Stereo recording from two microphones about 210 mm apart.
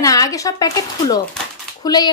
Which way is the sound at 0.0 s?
15° left (ahead or behind).